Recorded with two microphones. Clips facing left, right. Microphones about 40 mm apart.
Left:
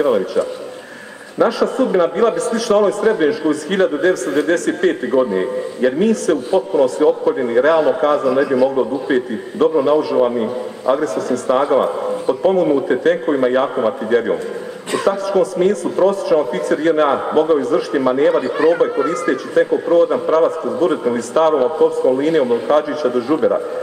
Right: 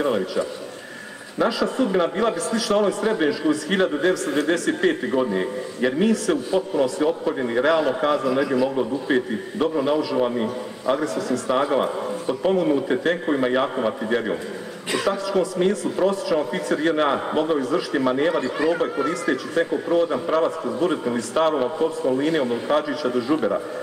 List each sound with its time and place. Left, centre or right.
0.0 s a man's voice: centre
18.6 s a man's voice: centre
20.6 s a man's voice: centre
21.4 s a man's voice: centre
21.6 s a man's voice: centre